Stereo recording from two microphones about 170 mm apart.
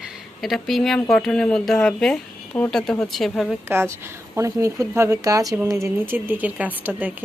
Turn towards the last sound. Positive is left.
turn(degrees=-10)  # may be behind; listen again after turning